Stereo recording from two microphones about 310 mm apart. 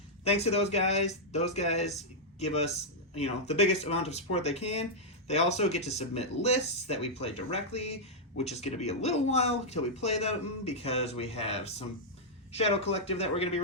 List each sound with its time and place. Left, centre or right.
0.3 s speech: centre